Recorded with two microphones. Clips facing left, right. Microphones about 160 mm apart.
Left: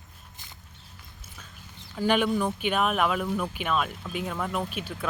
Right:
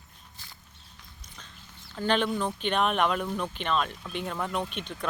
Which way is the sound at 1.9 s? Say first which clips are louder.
Left 3 dB; 10° left (ahead or behind).